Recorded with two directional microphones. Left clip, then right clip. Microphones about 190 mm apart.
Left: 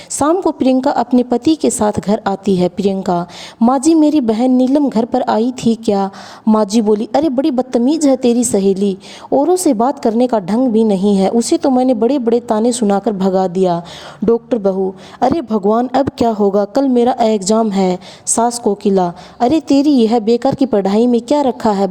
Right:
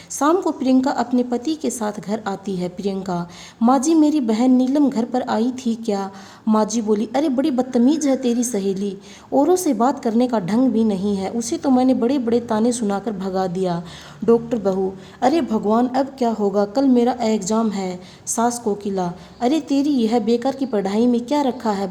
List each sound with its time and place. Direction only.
0.2 s a woman's voice: 35° left (ahead or behind)